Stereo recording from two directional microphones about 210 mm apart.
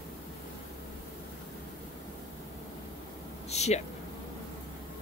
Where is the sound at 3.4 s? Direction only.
30° left (ahead or behind).